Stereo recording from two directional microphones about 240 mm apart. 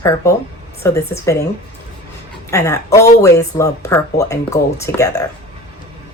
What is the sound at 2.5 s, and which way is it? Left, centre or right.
Speech, centre.